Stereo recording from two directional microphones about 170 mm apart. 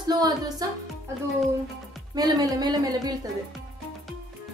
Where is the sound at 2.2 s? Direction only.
20° right (ahead or behind).